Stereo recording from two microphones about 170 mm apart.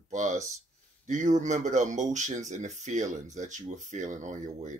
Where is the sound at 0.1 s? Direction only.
45° right (ahead or behind).